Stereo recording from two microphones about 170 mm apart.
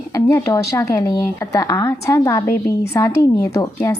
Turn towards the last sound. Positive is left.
turn(degrees=20)  # may be behind; listen again after turning